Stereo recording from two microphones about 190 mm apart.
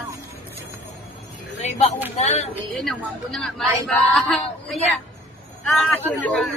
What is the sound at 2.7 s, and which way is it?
A woman's voice, centre (ahead or behind).